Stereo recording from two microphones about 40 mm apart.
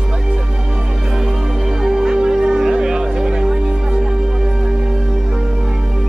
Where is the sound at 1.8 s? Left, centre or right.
Centre.